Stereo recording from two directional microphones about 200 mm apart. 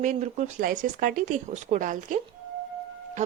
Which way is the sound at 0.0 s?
35° right (ahead or behind).